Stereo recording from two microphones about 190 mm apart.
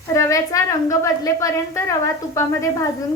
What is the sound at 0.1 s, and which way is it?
A woman's voice, 15° left (ahead or behind).